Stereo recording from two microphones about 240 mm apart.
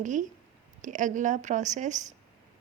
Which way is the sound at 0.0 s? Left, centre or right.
Right.